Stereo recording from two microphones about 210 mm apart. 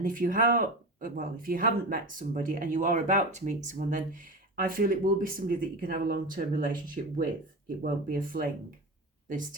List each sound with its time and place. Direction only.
0.0 s speech: 40° right (ahead or behind)